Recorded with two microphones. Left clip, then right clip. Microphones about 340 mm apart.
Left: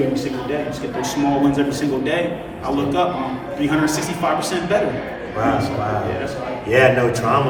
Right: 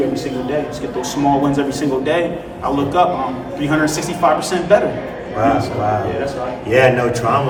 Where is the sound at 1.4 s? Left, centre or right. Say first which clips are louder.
Right 1 dB; centre.